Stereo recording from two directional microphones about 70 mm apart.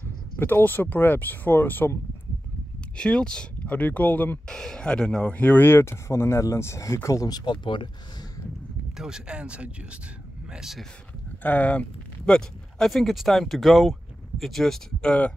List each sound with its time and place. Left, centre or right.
0.4 s speech: left
3.0 s speech: centre
4.5 s speech: centre
5.6 s speech: left
7.2 s speech: left
8.9 s speech: centre
10.5 s speech: centre
11.4 s speech: left
12.3 s speech: centre